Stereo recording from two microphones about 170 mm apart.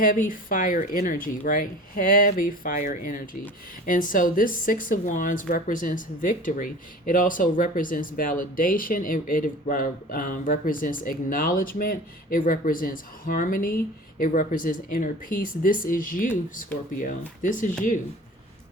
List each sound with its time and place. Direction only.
0.0 s speech: 50° left (ahead or behind)